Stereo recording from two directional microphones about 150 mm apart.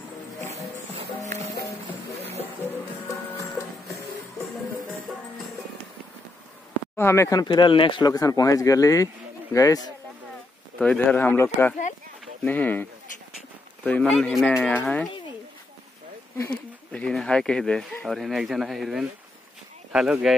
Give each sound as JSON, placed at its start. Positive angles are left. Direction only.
{"t": 3.1, "sound": "music", "side_deg": 15}
{"t": 7.0, "sound": "speech", "side_deg": 15}
{"t": 10.8, "sound": "speech", "side_deg": 5}
{"t": 13.8, "sound": "speech", "side_deg": 5}
{"t": 16.3, "sound": "speech", "side_deg": 10}